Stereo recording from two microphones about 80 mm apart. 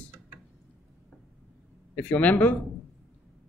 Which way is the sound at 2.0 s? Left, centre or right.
Left.